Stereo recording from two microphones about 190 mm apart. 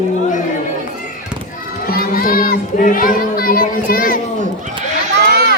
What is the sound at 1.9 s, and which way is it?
Child singing, 50° left (ahead or behind).